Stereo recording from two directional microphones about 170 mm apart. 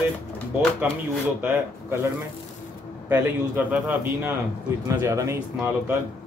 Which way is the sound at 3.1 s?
10° right (ahead or behind).